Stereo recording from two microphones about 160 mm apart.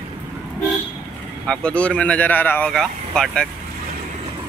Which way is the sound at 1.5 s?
5° left (ahead or behind).